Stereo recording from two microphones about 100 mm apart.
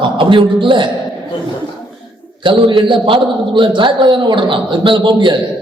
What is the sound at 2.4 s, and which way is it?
A man's voice, 55° right (ahead or behind).